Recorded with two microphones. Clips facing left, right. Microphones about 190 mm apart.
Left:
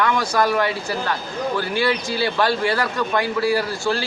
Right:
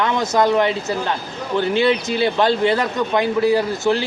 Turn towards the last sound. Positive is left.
turn(degrees=-20)  # may be behind; listen again after turning